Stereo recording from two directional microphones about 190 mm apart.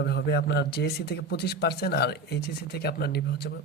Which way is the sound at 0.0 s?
60° left (ahead or behind).